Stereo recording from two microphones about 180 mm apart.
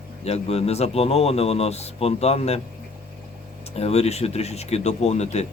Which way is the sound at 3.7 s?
35° left (ahead or behind).